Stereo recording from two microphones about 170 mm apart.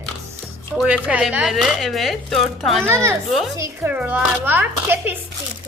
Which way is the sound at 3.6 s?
10° right (ahead or behind).